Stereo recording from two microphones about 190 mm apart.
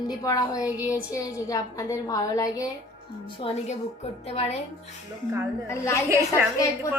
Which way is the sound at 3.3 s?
30° left (ahead or behind).